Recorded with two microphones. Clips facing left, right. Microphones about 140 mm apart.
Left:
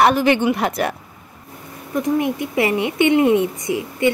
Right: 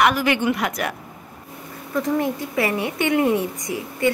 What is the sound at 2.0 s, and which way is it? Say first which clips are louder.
A woman's voice: left 3 dB; 20° left (ahead or behind).